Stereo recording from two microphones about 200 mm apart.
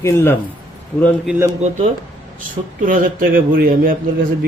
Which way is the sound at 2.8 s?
45° right (ahead or behind).